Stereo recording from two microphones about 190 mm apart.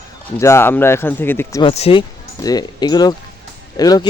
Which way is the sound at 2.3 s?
20° left (ahead or behind).